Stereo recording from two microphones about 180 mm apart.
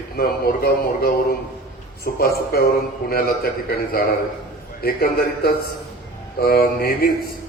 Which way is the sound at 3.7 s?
55° left (ahead or behind).